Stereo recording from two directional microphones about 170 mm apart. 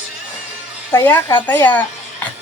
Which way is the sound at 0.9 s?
15° left (ahead or behind).